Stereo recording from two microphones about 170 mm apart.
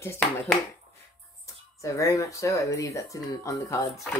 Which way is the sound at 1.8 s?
20° left (ahead or behind).